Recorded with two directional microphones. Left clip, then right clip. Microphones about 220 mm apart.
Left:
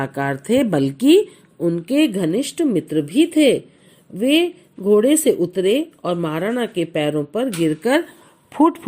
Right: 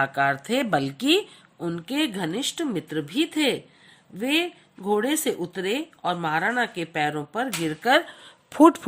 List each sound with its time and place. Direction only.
0.0 s speech: centre (ahead or behind)
8.5 s speech: 25° right (ahead or behind)